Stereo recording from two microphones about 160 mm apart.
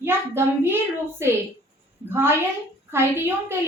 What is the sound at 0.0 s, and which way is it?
A woman's voice, 15° right (ahead or behind).